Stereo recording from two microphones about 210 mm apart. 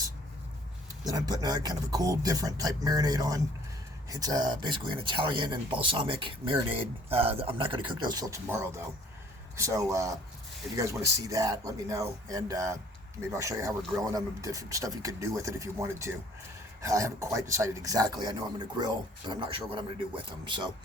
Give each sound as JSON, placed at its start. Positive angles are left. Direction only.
{"t": 1.0, "sound": "speech", "side_deg": -20}